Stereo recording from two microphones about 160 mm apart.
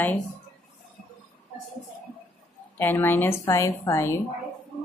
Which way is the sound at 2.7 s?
15° left (ahead or behind).